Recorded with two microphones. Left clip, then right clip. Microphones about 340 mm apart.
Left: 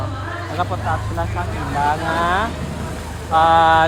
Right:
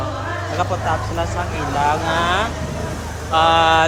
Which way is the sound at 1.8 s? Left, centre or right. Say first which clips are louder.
Even; centre.